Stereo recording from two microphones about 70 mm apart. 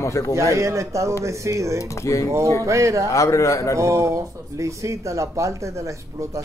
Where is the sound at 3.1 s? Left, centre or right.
Left.